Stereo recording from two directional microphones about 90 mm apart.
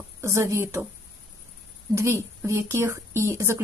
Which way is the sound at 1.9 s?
30° right (ahead or behind).